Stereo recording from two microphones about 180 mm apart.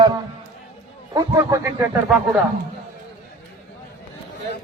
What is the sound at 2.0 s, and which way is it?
Speech, centre (ahead or behind).